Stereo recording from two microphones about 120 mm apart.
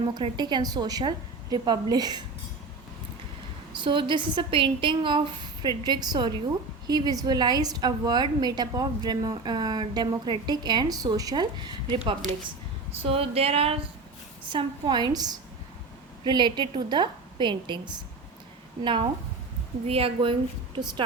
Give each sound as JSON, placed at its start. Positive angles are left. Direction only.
{"t": 0.1, "sound": "a woman's voice", "side_deg": -35}
{"t": 3.8, "sound": "a woman's voice", "side_deg": -45}
{"t": 13.1, "sound": "a sound", "side_deg": -55}
{"t": 14.5, "sound": "a woman's voice", "side_deg": -40}
{"t": 19.8, "sound": "a woman's voice", "side_deg": -55}